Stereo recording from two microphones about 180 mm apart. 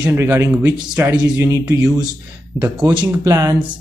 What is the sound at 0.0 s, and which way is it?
Speech, 15° right (ahead or behind).